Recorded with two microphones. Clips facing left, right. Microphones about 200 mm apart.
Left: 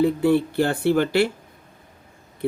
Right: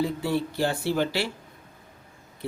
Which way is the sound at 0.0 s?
55° left (ahead or behind).